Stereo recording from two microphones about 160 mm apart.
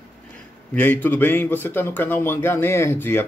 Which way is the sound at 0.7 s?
10° left (ahead or behind).